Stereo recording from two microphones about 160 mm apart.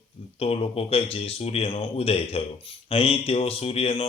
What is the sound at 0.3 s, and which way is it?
Speech, 35° left (ahead or behind).